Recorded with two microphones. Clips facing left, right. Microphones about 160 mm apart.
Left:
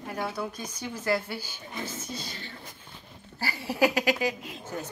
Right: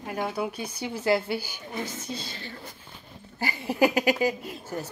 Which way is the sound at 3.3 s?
15° right (ahead or behind).